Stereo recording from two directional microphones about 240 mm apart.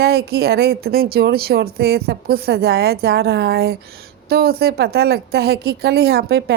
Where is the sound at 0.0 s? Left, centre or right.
Right.